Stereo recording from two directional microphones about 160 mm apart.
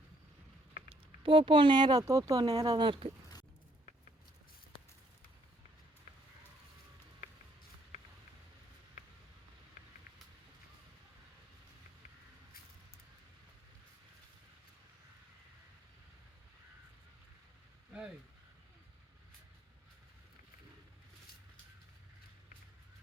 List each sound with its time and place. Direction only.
0.9 s speech: 30° right (ahead or behind)